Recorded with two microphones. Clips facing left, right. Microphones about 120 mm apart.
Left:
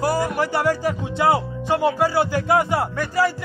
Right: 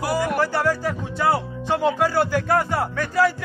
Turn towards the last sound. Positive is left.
turn(degrees=10)  # may be behind; listen again after turning